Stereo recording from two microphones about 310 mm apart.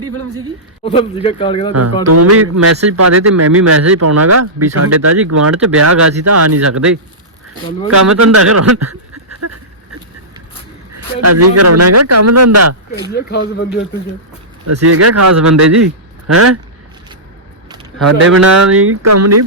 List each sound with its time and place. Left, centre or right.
0.9 s speech: centre
2.0 s a man's voice: right
9.4 s a sound: right
10.9 s a man's voice: right
13.1 s speech: left
14.7 s a man's voice: right
18.2 s a man's voice: right